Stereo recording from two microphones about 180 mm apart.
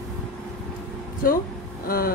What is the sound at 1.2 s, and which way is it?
Speech, 55° left (ahead or behind).